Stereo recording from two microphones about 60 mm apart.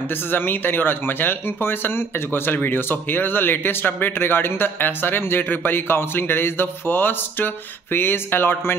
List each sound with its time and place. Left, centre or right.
0.1 s speech: left